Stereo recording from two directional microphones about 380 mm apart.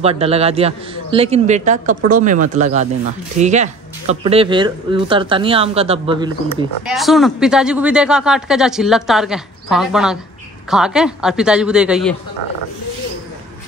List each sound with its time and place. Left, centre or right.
0.0 s speech: centre
6.9 s speech: centre